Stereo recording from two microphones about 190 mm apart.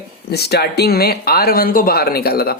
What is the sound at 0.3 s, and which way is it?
Speech, 60° left (ahead or behind).